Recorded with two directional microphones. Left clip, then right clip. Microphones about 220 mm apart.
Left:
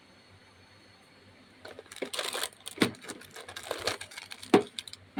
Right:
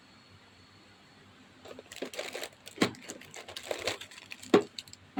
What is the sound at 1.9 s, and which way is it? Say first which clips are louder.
Crushing: left 4 dB; 10° left (ahead or behind).